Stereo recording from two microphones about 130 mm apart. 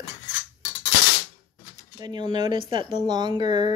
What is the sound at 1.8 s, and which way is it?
Speech, 30° right (ahead or behind).